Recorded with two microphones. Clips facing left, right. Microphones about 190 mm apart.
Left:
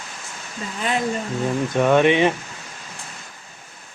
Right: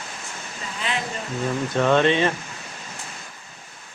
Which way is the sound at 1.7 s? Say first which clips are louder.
Left 2 dB; 15° left (ahead or behind).